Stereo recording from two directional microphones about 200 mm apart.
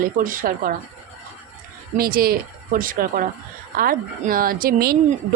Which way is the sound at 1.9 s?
50° right (ahead or behind).